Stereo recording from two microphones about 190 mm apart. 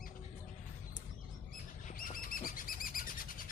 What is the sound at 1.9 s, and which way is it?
Bird, 45° left (ahead or behind).